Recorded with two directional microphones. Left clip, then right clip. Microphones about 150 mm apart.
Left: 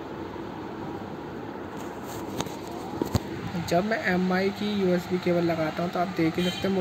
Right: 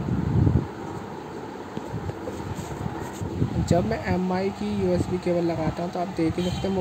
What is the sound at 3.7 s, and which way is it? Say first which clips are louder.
Speech: left 1 dB; 15° right (ahead or behind).